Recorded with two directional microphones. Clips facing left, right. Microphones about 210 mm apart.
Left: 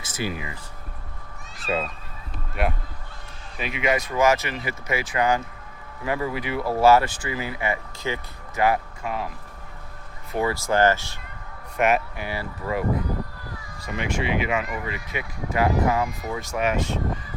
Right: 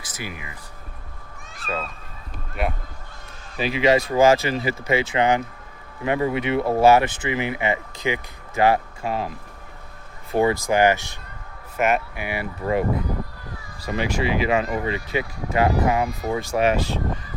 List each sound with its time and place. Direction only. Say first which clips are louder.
0.0 s speech: left 5 dB; 25° left (ahead or behind)
1.6 s speech: left 3 dB; 20° left (ahead or behind)
2.6 s speech: even; centre (ahead or behind)
3.6 s speech: right 6 dB; 30° right (ahead or behind)
8.5 s speech: right 3 dB; 30° right (ahead or behind)
10.3 s speech: right 4 dB; 20° right (ahead or behind)
11.8 s speech: even; centre (ahead or behind)
12.1 s speech: right 2 dB; 15° right (ahead or behind)
13.8 s speech: right 3 dB; 35° right (ahead or behind)